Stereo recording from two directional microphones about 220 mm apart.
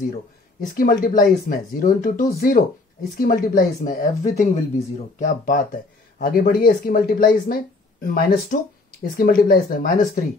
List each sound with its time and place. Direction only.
0.7 s speech: 40° left (ahead or behind)